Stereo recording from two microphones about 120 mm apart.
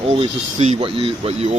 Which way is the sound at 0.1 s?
60° right (ahead or behind).